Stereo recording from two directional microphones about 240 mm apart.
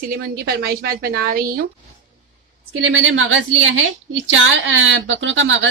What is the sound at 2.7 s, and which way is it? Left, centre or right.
A woman's voice, right.